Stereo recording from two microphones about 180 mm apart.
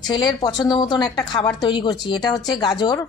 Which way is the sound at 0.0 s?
25° left (ahead or behind).